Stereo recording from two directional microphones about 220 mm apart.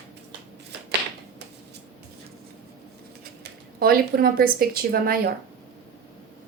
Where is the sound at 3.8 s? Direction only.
40° right (ahead or behind).